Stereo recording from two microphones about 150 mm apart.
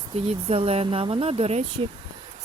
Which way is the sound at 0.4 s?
40° right (ahead or behind).